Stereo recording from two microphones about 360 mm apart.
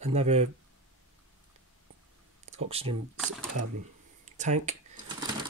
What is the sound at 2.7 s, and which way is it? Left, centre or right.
Speech, centre.